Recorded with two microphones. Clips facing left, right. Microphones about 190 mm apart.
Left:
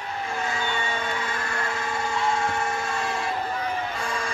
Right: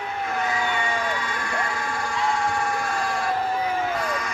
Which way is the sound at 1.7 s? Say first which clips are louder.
Even; 25° left (ahead or behind).